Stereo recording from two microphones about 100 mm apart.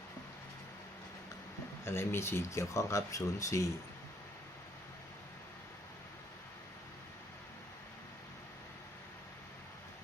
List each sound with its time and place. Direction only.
1.8 s speech: 25° left (ahead or behind)